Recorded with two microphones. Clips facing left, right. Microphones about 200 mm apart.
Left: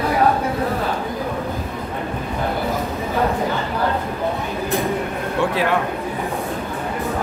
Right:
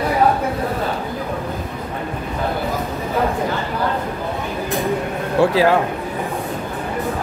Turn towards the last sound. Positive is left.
turn(degrees=-30)  # may be behind; listen again after turning